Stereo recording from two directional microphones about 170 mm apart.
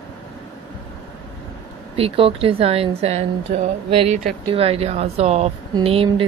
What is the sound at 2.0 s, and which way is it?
A woman's voice, 35° right (ahead or behind).